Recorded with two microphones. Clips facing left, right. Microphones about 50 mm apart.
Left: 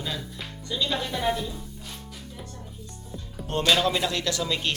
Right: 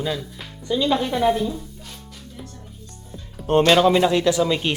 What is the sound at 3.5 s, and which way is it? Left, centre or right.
Speech, right.